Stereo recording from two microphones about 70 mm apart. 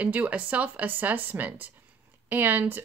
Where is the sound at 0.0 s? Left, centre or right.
Right.